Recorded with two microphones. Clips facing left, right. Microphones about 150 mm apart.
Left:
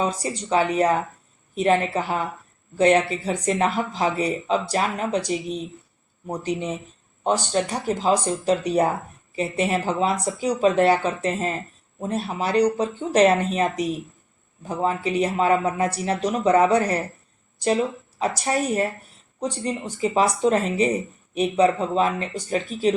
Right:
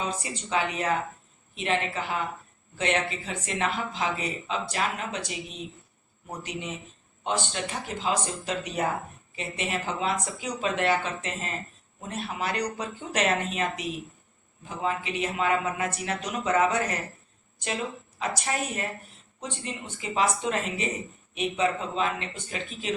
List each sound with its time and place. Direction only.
0.0 s speech: 40° left (ahead or behind)
18.2 s speech: 40° left (ahead or behind)